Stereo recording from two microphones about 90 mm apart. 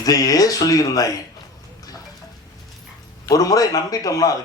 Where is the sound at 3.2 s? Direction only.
40° left (ahead or behind).